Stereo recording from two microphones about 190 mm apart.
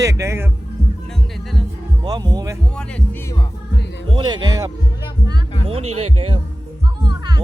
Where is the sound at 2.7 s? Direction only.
5° left (ahead or behind).